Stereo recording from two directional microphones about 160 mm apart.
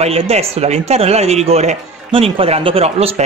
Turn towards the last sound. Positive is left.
turn(degrees=-40)  # may be behind; listen again after turning